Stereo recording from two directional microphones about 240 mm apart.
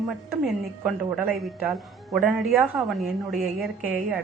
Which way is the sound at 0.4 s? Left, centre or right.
Centre.